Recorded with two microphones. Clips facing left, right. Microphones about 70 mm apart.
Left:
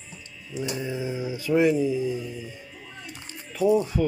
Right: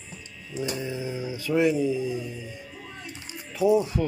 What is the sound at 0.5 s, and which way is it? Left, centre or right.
Speech, centre.